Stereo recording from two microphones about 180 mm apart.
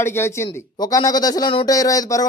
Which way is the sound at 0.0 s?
15° left (ahead or behind).